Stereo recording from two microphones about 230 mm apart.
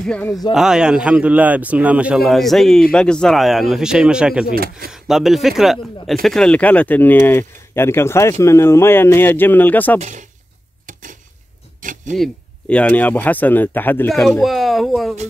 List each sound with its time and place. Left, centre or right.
0.0 s speech: centre
4.6 s speech: right
4.9 s speech: centre
9.9 s speech: right
10.9 s a sound: right
12.2 s speech: centre